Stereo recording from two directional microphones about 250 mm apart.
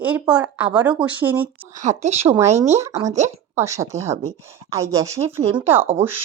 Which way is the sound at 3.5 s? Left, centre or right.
Centre.